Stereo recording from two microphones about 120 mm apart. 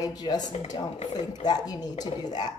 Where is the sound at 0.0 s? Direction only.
30° left (ahead or behind).